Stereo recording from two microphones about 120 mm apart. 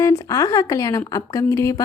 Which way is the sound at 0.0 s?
25° left (ahead or behind).